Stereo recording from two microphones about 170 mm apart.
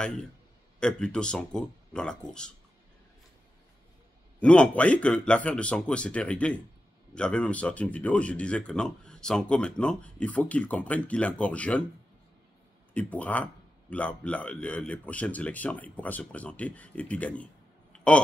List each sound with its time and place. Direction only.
0.0 s speech: 5° left (ahead or behind)
4.4 s speech: 5° left (ahead or behind)
12.9 s speech: 10° left (ahead or behind)
17.9 s a sound: 5° left (ahead or behind)